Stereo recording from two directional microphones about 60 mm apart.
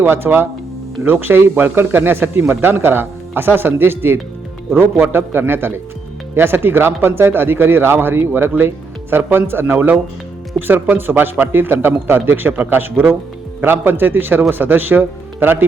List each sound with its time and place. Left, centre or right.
0.0 s speech: right
9.7 s speech: right